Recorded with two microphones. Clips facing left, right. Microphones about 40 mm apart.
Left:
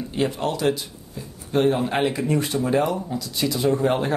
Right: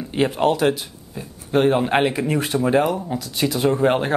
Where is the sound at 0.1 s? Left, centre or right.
Right.